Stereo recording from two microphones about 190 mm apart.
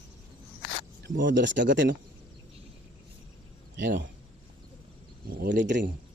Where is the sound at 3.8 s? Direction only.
65° right (ahead or behind).